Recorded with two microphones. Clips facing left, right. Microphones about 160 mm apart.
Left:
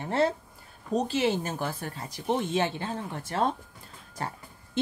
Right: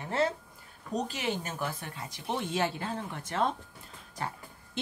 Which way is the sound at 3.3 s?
40° left (ahead or behind).